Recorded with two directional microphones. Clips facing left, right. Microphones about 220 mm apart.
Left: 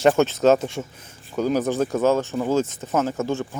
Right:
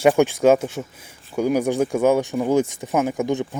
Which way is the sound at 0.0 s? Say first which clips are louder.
Right 1 dB; 10° right (ahead or behind).